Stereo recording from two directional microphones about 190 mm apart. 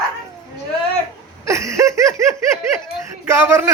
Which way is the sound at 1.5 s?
15° right (ahead or behind).